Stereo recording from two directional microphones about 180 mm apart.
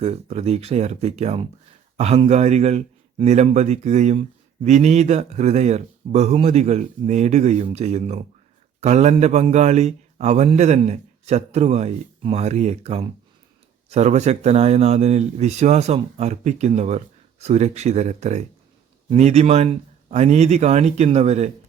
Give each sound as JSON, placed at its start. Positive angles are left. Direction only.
{"t": 0.0, "sound": "speech", "side_deg": -35}